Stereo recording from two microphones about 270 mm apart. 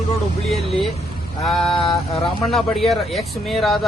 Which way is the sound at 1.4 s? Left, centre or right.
Centre.